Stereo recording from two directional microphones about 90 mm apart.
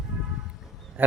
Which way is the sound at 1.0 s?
20° right (ahead or behind).